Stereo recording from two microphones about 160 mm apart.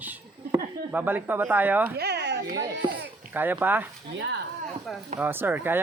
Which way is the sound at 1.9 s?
90° right.